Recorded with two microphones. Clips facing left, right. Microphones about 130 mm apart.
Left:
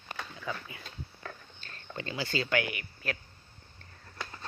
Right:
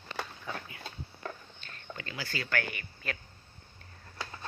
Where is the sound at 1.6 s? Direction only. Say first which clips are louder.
Left 4 dB; 35° left (ahead or behind); by 3.2 s 5° left (ahead or behind).